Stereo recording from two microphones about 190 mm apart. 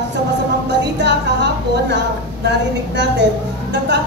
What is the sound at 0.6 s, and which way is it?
Music, 65° right (ahead or behind).